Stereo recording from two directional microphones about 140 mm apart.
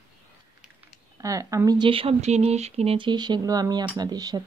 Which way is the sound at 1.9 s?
40° right (ahead or behind).